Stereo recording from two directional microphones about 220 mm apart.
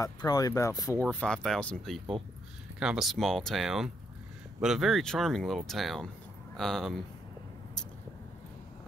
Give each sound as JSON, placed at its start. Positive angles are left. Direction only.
{"t": 0.0, "sound": "speech", "side_deg": 15}
{"t": 1.0, "sound": "speech", "side_deg": 5}